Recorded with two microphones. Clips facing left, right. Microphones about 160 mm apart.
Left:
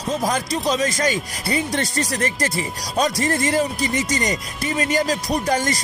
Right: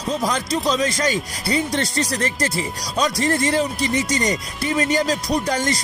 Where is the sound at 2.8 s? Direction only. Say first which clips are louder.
Even; 45° left (ahead or behind).